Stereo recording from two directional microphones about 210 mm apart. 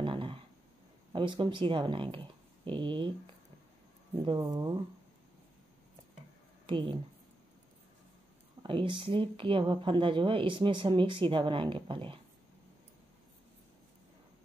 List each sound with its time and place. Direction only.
0.0 s a sound: 25° right (ahead or behind)
1.1 s speech: 25° right (ahead or behind)
4.1 s speech: 20° right (ahead or behind)
6.6 s a woman's voice: 20° right (ahead or behind)
8.6 s speech: 25° right (ahead or behind)